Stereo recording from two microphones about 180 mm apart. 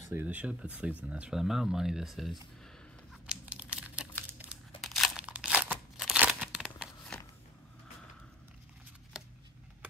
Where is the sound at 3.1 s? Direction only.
5° right (ahead or behind).